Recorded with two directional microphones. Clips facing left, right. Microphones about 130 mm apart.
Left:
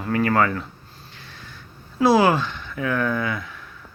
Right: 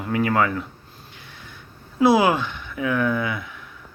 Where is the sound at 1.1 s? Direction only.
15° right (ahead or behind).